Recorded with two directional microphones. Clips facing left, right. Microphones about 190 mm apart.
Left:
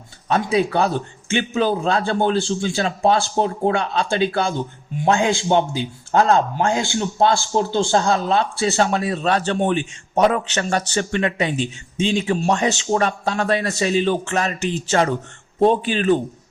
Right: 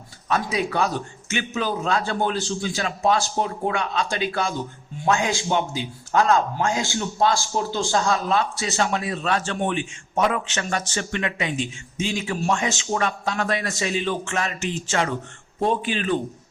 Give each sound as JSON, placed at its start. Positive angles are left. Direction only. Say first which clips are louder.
{"t": 0.3, "sound": "a man's voice", "louder": "left 5 dB", "side_deg": 30}